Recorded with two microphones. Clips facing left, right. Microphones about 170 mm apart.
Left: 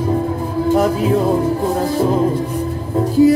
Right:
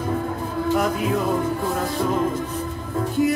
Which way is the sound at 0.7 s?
30° left (ahead or behind).